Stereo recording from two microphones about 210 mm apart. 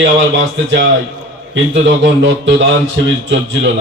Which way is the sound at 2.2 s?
60° right (ahead or behind).